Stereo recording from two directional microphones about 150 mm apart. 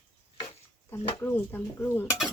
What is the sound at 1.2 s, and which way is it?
Speech, 15° left (ahead or behind).